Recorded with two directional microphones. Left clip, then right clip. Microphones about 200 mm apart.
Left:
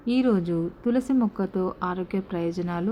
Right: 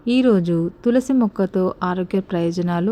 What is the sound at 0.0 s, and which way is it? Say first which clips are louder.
Speech: right 7 dB; 30° right (ahead or behind).